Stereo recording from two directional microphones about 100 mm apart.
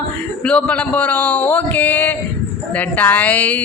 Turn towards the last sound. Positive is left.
turn(degrees=15)  # may be behind; listen again after turning